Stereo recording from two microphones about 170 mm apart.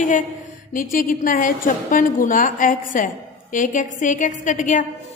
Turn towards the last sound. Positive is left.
turn(degrees=50)  # may be behind; listen again after turning